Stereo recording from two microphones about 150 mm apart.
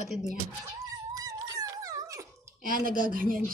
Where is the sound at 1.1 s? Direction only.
25° right (ahead or behind).